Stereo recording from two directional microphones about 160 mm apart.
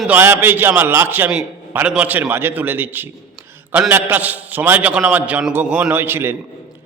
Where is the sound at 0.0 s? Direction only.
15° right (ahead or behind).